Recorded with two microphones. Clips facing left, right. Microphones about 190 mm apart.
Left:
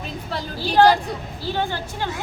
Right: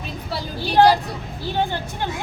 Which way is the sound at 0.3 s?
10° right (ahead or behind).